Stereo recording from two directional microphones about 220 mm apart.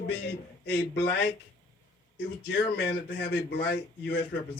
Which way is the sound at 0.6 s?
50° left (ahead or behind).